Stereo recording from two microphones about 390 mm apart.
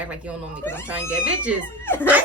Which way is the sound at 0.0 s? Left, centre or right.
Centre.